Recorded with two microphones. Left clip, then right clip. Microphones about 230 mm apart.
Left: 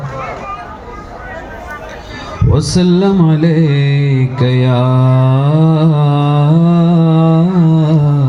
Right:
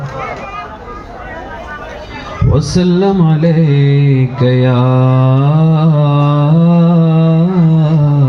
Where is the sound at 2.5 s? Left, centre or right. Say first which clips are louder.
Even; left.